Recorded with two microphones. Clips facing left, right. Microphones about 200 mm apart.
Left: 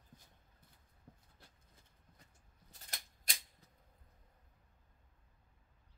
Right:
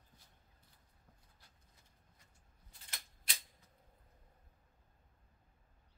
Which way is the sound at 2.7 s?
40° left (ahead or behind).